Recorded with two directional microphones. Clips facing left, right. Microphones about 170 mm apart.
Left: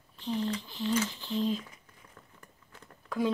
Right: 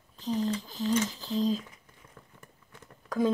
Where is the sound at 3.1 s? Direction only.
45° right (ahead or behind).